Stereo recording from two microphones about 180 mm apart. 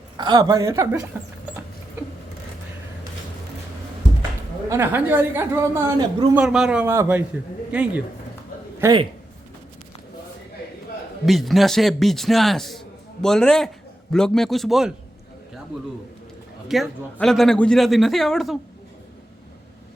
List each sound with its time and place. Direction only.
0.2 s speech: 25° right (ahead or behind)
4.7 s speech: 10° right (ahead or behind)
8.8 s a man's voice: 25° right (ahead or behind)
11.3 s a man's voice: centre (ahead or behind)
16.6 s a man's voice: centre (ahead or behind)